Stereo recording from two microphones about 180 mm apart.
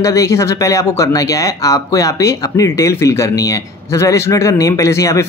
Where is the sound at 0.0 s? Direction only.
15° left (ahead or behind).